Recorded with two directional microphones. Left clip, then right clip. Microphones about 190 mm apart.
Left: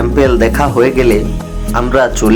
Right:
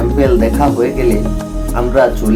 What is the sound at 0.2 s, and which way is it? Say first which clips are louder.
Speech: left 2 dB; 15° left (ahead or behind).